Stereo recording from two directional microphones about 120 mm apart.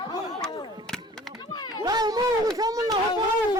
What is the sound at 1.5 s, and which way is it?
Children playing, 35° left (ahead or behind).